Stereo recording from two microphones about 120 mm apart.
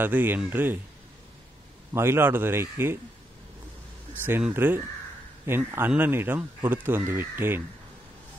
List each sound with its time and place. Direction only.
0.0 s speech: 15° right (ahead or behind)
2.0 s a man's voice: 20° right (ahead or behind)
4.4 s speech: 15° right (ahead or behind)